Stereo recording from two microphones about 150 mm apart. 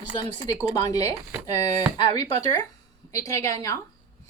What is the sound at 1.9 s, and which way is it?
A woman's voice, 30° left (ahead or behind).